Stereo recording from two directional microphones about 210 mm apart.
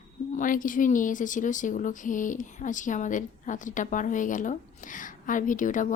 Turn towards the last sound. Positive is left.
turn(degrees=40)  # may be behind; listen again after turning